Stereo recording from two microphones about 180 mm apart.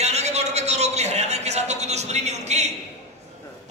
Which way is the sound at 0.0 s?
35° right (ahead or behind).